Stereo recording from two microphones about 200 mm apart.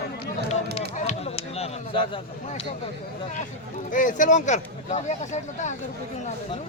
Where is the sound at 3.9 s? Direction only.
40° left (ahead or behind).